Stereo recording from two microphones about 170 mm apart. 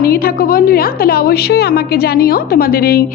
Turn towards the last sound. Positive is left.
turn(degrees=60)  # may be behind; listen again after turning